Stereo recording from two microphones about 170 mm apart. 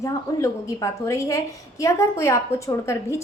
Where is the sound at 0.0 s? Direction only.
20° left (ahead or behind).